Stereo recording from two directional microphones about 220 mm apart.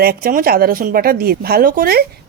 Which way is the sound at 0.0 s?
40° right (ahead or behind).